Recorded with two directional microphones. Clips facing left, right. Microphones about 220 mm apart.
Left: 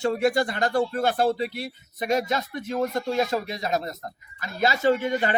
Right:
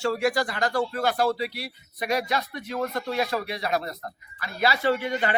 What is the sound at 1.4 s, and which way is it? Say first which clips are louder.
Speech: left 2 dB; 50° left (ahead or behind).